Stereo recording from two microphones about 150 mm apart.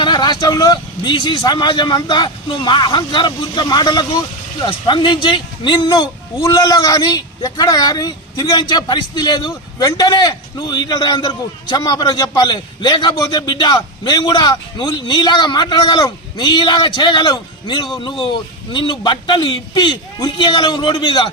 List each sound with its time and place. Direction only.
0.0 s a man's voice: 30° left (ahead or behind)